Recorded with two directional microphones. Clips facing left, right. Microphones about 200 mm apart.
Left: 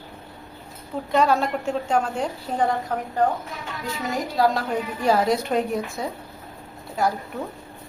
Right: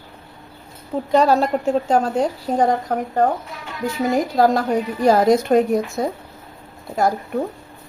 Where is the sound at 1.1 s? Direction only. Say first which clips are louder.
Right 5 dB; 35° right (ahead or behind).